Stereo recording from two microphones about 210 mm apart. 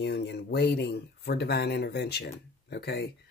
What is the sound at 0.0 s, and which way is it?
Speech, 50° left (ahead or behind).